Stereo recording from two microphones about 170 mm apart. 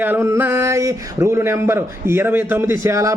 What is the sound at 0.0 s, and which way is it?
Speech, 15° right (ahead or behind).